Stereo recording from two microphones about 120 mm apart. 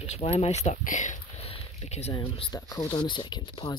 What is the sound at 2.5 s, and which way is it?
Speech, 35° left (ahead or behind).